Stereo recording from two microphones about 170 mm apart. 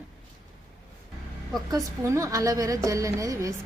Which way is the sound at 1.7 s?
20° right (ahead or behind).